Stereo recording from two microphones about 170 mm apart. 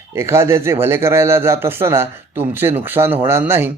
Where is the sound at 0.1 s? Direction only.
15° right (ahead or behind).